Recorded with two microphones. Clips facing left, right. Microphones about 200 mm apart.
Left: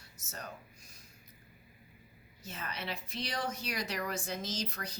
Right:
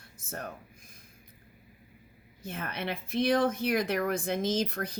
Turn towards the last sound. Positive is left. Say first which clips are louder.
# right 10 dB
turn(degrees=-55)  # may be behind; listen again after turning